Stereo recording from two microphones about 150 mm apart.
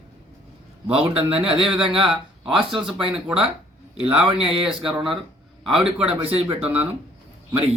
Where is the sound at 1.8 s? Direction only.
35° right (ahead or behind).